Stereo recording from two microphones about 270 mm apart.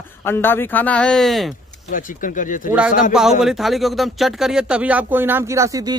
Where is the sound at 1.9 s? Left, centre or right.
Left.